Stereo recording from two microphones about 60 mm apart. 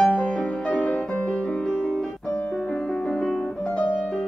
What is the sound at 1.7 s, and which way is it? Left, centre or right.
Piano, centre.